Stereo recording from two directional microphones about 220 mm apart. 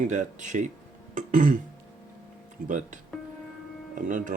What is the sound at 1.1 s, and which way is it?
Throat clearing, 35° right (ahead or behind).